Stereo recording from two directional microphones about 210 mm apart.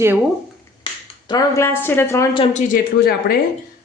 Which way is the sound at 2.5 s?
45° left (ahead or behind).